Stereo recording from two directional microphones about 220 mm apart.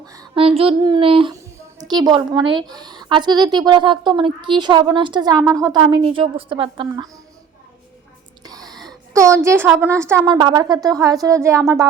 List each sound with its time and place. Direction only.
0.0 s a woman's voice: 15° right (ahead or behind)
8.4 s a sound: 15° right (ahead or behind)
9.1 s a woman's voice: 15° right (ahead or behind)